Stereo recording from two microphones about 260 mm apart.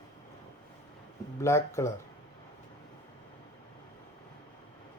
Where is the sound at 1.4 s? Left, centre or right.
Centre.